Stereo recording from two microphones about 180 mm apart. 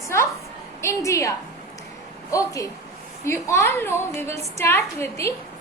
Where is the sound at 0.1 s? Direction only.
15° left (ahead or behind).